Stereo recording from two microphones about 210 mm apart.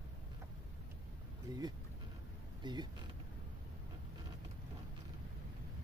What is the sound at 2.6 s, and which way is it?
Speech, 20° right (ahead or behind).